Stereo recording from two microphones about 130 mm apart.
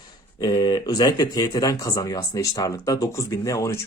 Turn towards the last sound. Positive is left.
turn(degrees=25)  # may be behind; listen again after turning